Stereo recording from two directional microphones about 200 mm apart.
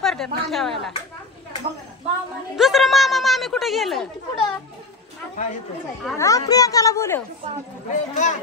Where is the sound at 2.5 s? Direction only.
Centre (ahead or behind).